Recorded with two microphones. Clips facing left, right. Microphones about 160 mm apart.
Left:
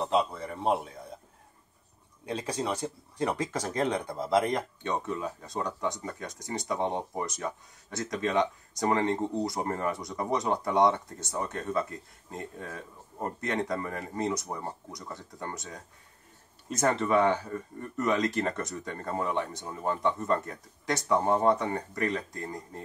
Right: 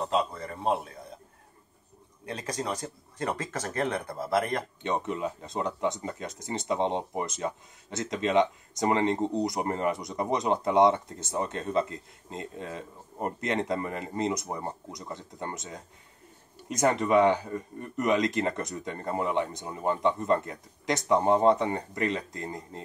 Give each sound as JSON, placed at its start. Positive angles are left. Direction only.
{"t": 0.0, "sound": "a man's voice", "side_deg": 10}
{"t": 2.2, "sound": "speech", "side_deg": 10}
{"t": 4.8, "sound": "speech", "side_deg": -20}